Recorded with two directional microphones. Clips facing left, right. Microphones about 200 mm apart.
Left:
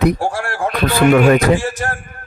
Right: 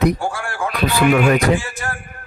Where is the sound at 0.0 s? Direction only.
40° left (ahead or behind).